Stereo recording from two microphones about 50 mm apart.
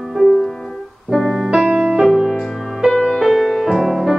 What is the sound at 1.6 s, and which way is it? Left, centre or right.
Music, right.